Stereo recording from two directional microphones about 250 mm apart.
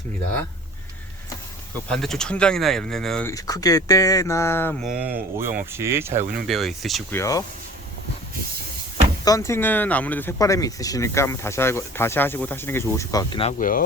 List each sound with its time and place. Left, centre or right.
1.9 s speech: centre
6.5 s speech: centre
7.2 s speech: centre
9.2 s speech: centre
13.6 s speech: left